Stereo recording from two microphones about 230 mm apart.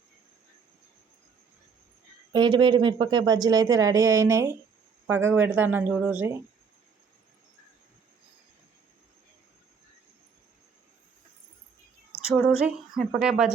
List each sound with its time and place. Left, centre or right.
2.3 s speech: centre
12.5 s speech: centre